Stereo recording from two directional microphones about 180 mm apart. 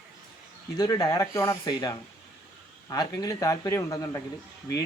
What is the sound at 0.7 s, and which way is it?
Speech, 20° left (ahead or behind).